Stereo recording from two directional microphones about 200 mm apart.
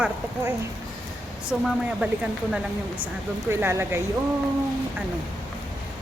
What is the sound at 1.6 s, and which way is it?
Speech, 5° right (ahead or behind).